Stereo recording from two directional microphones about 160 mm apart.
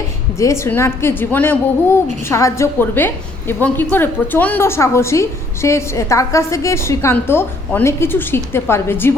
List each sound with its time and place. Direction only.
0.3 s a woman's voice: 20° left (ahead or behind)